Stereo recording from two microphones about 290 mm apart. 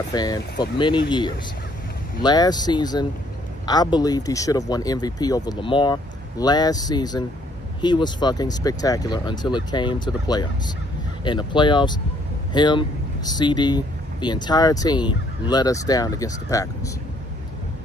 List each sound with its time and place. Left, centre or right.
0.1 s speech: centre